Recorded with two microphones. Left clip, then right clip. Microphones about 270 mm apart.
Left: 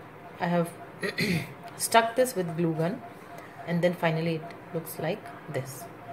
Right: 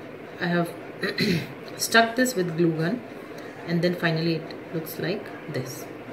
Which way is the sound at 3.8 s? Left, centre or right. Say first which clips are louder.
Right 1 dB; left.